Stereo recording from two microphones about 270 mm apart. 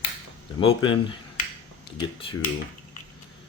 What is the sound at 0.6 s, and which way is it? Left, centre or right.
Speech, centre.